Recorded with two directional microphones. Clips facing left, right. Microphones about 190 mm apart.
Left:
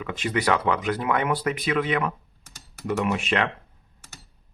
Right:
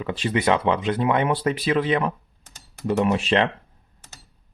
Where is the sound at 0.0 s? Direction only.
30° right (ahead or behind).